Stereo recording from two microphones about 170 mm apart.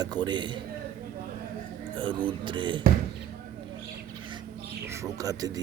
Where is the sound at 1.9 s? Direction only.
30° right (ahead or behind).